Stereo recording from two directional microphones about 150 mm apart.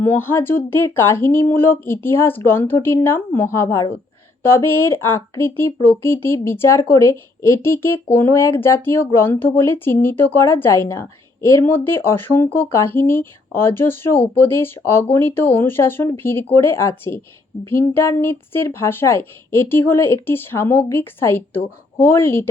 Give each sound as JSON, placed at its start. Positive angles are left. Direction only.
{"t": 0.0, "sound": "speech", "side_deg": 15}